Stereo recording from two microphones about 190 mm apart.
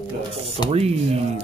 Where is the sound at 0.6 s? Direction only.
25° left (ahead or behind).